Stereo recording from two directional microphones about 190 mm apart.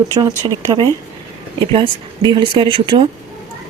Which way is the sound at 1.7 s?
25° right (ahead or behind).